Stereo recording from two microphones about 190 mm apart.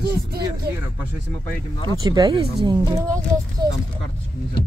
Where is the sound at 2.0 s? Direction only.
20° right (ahead or behind).